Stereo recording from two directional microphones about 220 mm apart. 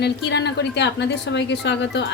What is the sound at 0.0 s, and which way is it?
A woman's voice, 50° left (ahead or behind).